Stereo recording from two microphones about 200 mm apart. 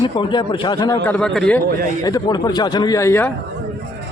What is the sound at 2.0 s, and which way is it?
A man's voice, 20° left (ahead or behind).